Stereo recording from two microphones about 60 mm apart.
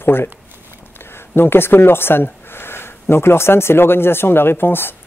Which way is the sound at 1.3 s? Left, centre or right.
Left.